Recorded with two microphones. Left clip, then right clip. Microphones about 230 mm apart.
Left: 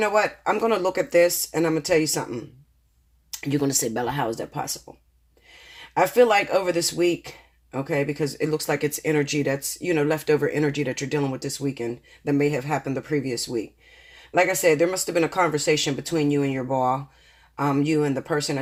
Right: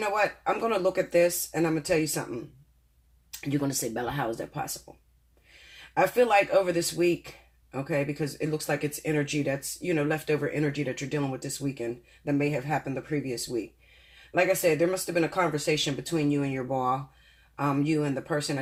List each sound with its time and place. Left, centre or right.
0.0 s speech: left
3.4 s speech: left
5.9 s speech: left